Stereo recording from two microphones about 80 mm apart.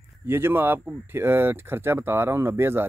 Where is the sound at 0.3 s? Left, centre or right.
Right.